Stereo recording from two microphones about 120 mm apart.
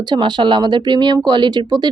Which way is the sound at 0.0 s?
40° right (ahead or behind).